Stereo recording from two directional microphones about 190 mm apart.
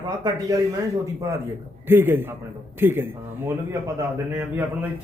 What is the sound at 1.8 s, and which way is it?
A man's voice, 10° right (ahead or behind).